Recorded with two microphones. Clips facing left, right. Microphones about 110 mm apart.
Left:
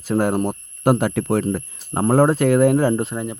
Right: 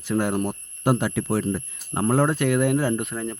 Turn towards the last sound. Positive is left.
turn(degrees=20)  # may be behind; listen again after turning